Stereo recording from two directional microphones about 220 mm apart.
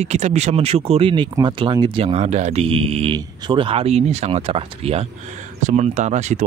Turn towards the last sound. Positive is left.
turn(degrees=-30)  # may be behind; listen again after turning